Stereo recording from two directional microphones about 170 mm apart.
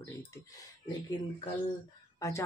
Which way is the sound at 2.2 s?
20° left (ahead or behind).